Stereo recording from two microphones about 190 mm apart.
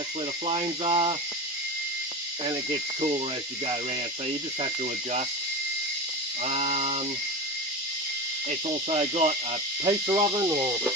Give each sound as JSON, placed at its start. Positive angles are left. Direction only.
{"t": 0.4, "sound": "speech", "side_deg": -30}
{"t": 6.4, "sound": "a sound", "side_deg": -35}
{"t": 8.4, "sound": "speech", "side_deg": -30}